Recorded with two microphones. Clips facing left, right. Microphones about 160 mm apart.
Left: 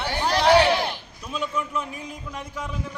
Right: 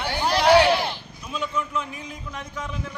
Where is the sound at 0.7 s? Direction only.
15° left (ahead or behind).